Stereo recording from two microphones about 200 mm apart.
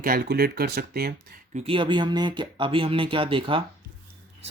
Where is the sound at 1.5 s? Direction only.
30° right (ahead or behind).